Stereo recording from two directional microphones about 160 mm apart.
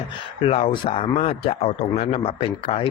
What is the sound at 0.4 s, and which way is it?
Speech, 40° left (ahead or behind).